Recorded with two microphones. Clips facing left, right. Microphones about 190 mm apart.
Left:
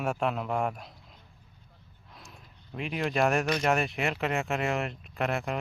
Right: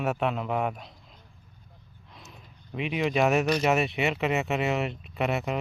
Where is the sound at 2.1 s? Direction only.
Centre (ahead or behind).